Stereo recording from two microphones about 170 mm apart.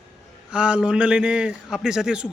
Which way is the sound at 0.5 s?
5° right (ahead or behind).